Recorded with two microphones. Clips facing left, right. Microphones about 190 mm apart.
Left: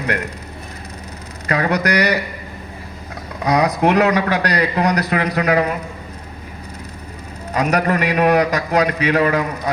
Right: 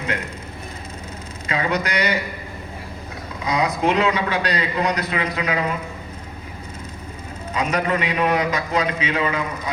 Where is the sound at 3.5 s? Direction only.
70° left (ahead or behind).